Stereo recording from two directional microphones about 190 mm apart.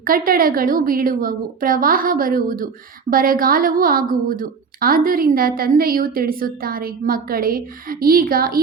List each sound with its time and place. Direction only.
0.0 s a woman's voice: 50° right (ahead or behind)